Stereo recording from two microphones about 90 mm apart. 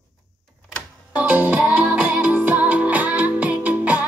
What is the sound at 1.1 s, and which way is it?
Music, 15° right (ahead or behind).